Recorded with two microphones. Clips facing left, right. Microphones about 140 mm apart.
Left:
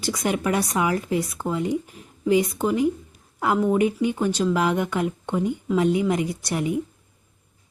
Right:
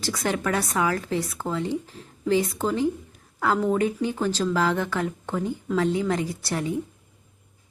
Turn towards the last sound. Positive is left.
turn(degrees=15)  # may be behind; listen again after turning